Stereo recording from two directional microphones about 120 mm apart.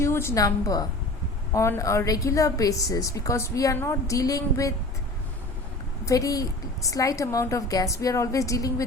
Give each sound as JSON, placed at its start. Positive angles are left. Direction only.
{"t": 0.0, "sound": "a woman's voice", "side_deg": 20}
{"t": 6.1, "sound": "a woman's voice", "side_deg": 30}